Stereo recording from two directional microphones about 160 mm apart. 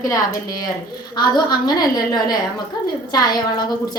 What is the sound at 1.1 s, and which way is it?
A woman's voice, 25° left (ahead or behind).